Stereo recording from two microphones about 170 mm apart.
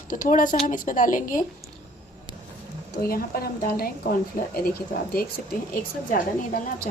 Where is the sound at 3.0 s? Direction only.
60° left (ahead or behind).